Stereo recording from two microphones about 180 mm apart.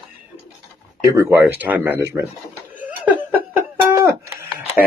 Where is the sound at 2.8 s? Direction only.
10° right (ahead or behind).